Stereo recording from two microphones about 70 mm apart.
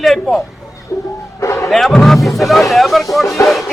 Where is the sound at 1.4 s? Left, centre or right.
Left.